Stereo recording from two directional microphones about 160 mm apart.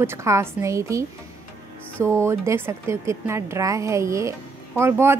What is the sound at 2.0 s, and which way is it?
Speech, 15° right (ahead or behind).